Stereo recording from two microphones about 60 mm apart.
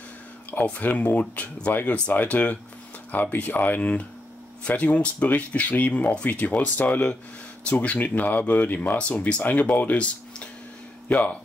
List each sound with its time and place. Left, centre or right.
0.5 s speech: left